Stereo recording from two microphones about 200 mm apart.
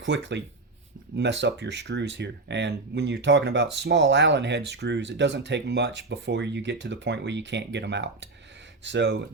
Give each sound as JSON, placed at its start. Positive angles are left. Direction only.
{"t": 0.0, "sound": "speech", "side_deg": -60}